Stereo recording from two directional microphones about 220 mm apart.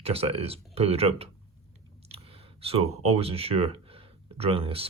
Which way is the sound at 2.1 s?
25° right (ahead or behind).